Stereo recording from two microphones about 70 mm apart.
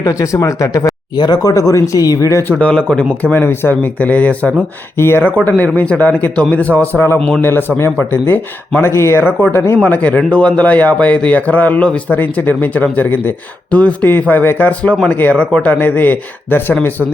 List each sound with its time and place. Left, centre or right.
0.0 s speech: left
1.1 s speech: left
2.5 s speech: centre
3.3 s a man's voice: left
4.9 s speech: left
5.5 s a man's voice: left
7.9 s speech: left
9.7 s a man's voice: left